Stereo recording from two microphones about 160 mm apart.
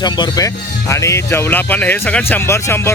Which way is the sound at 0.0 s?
25° left (ahead or behind).